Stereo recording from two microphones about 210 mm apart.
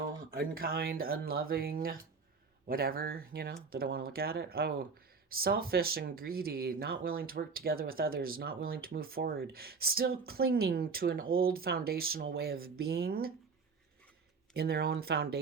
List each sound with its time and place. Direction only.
0.2 s speech: 45° right (ahead or behind)
14.5 s speech: 50° right (ahead or behind)